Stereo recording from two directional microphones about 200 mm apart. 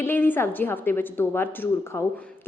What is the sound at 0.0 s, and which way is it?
A woman's voice, 10° left (ahead or behind).